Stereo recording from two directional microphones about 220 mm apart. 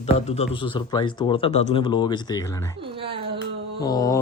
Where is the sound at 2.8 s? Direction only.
25° right (ahead or behind).